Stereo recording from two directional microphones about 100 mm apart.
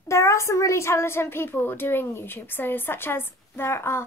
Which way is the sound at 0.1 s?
30° left (ahead or behind).